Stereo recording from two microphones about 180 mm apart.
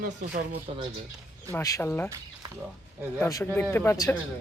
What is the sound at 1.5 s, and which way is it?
Speech, 20° left (ahead or behind).